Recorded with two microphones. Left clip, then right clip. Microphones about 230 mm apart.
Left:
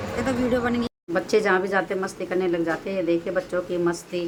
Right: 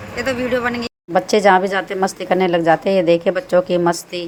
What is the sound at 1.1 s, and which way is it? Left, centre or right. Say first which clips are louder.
A woman's voice: right 8 dB; right.